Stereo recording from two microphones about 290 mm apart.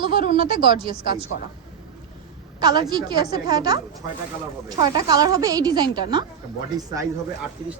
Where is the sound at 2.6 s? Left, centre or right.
Centre.